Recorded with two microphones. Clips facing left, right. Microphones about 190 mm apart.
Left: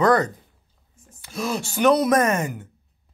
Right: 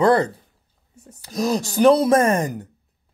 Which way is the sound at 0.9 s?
70° right (ahead or behind).